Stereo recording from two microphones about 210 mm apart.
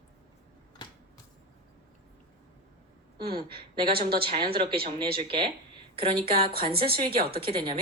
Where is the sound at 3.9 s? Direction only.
45° right (ahead or behind).